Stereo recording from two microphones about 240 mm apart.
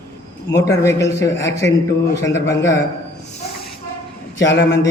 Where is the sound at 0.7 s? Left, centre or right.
Centre.